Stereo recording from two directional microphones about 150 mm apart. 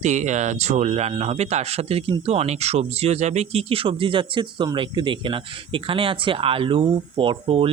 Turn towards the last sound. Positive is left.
turn(degrees=-40)  # may be behind; listen again after turning